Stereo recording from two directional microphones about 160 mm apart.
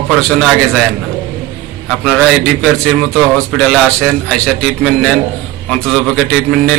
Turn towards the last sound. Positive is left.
turn(degrees=5)  # may be behind; listen again after turning